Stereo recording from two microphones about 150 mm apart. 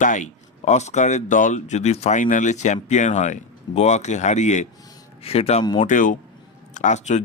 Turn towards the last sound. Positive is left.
turn(degrees=50)  # may be behind; listen again after turning